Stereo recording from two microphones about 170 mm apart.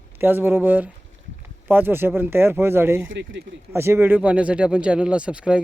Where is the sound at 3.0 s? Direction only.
90° right.